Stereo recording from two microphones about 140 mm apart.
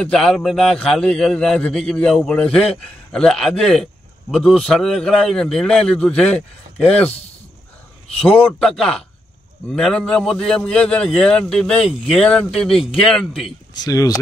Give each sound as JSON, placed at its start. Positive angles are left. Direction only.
{"t": 0.0, "sound": "a man's voice", "side_deg": 5}
{"t": 8.2, "sound": "a man's voice", "side_deg": 10}
{"t": 13.7, "sound": "speech", "side_deg": 25}